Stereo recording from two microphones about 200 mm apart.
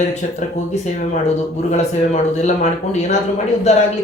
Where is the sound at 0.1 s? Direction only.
35° left (ahead or behind).